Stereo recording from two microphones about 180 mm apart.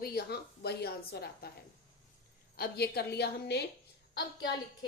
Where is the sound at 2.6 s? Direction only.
60° left (ahead or behind).